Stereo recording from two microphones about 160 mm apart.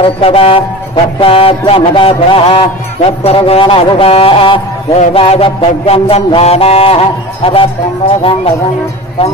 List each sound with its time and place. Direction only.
0.0 s music: 35° left (ahead or behind)